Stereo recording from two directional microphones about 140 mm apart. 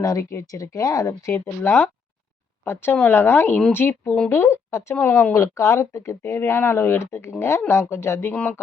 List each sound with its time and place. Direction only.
0.0 s speech: 20° left (ahead or behind)